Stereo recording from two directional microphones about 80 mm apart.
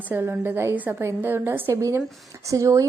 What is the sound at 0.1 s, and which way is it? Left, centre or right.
Speech, right.